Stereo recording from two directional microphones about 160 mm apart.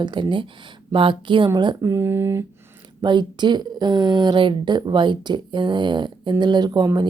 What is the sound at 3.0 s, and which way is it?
Speech, 30° right (ahead or behind).